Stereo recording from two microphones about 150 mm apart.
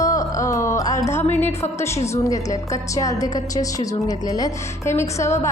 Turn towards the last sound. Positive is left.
turn(degrees=20)  # may be behind; listen again after turning